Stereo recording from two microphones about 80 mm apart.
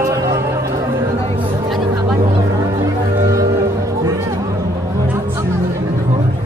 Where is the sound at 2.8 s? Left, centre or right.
Right.